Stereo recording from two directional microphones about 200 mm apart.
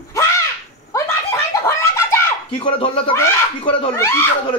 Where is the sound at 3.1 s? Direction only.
15° left (ahead or behind).